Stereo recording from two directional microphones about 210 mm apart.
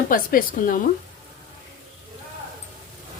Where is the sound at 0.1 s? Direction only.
40° left (ahead or behind).